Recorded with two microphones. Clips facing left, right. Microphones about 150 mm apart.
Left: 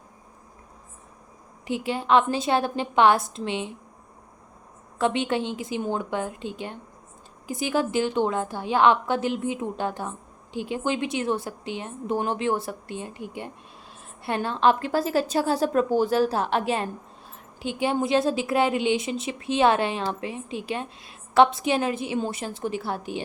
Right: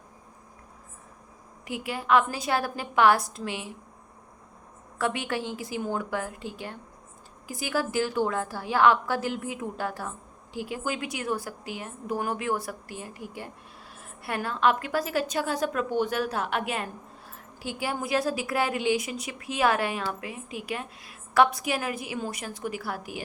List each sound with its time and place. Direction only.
1.6 s a woman's voice: 25° left (ahead or behind)
4.9 s a woman's voice: 20° left (ahead or behind)